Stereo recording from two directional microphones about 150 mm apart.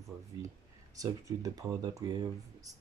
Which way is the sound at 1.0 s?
25° right (ahead or behind).